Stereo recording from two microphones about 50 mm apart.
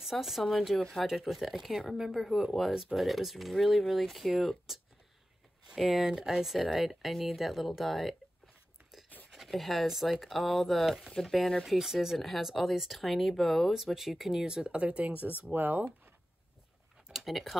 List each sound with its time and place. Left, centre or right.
0.0 s speech: centre
5.8 s speech: centre
9.3 s speech: centre
11.6 s speech: centre; by 15.1 s right
15.4 s speech: right
17.1 s speech: centre